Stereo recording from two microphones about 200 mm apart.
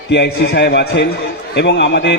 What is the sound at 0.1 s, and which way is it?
A man's voice, 60° left (ahead or behind).